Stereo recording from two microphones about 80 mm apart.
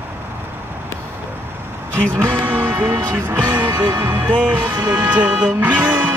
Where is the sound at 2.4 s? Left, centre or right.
Right.